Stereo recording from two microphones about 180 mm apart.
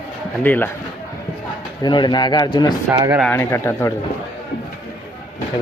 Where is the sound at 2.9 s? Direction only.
15° right (ahead or behind).